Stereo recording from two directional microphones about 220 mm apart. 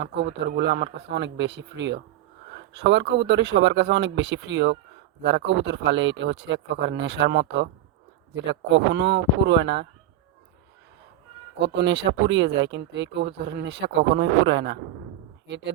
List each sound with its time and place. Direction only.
0.0 s speech: 50° right (ahead or behind)
11.6 s speech: 50° right (ahead or behind)